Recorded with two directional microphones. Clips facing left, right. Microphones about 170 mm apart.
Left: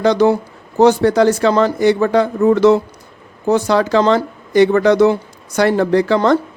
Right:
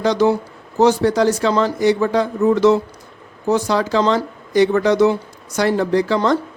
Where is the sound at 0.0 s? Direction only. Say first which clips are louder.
Left 3 dB; 55° left (ahead or behind).